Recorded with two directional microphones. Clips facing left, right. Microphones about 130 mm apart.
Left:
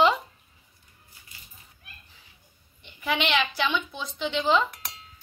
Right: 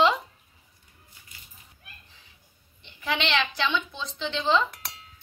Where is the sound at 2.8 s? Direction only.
10° left (ahead or behind).